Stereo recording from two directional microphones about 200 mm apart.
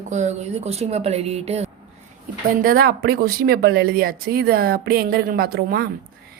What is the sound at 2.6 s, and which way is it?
Speech, 50° right (ahead or behind).